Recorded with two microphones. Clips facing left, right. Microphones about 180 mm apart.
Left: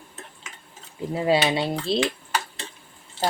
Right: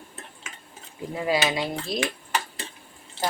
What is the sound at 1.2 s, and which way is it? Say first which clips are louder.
Speech: left 3 dB; 30° left (ahead or behind).